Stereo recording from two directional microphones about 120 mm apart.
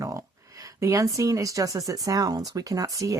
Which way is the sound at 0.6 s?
25° right (ahead or behind).